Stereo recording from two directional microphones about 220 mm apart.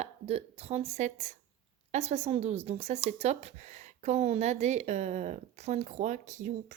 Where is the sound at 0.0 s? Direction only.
25° right (ahead or behind).